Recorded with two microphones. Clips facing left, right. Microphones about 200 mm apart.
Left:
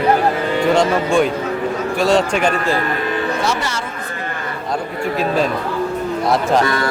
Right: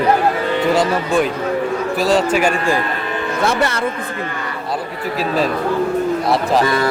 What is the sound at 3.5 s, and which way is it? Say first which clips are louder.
Speech: right 3 dB; 55° right (ahead or behind).